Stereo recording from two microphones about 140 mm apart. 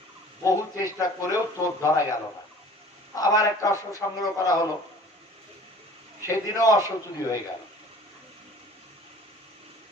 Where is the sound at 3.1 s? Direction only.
25° left (ahead or behind).